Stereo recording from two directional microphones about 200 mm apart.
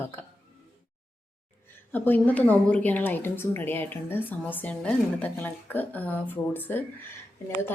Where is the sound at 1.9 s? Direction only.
10° left (ahead or behind).